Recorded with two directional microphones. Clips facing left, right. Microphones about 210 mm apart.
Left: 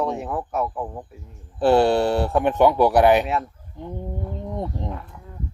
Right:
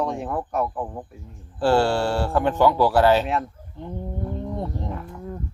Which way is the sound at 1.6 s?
20° left (ahead or behind).